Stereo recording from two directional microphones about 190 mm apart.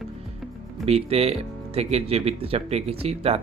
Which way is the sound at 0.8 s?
35° right (ahead or behind).